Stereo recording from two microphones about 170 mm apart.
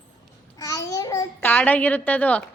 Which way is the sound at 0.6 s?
20° left (ahead or behind).